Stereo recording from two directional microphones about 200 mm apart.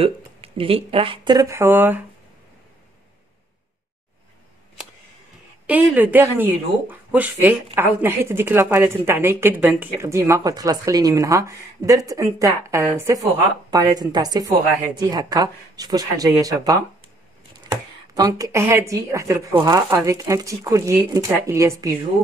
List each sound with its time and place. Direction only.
0.0 s speech: 30° right (ahead or behind); by 2.0 s 10° right (ahead or behind)
5.7 s a woman's voice: 10° right (ahead or behind)